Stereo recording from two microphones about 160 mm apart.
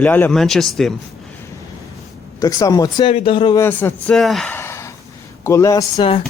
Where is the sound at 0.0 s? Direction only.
10° left (ahead or behind).